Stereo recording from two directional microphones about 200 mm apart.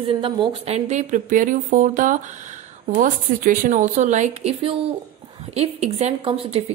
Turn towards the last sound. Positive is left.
turn(degrees=-25)  # may be behind; listen again after turning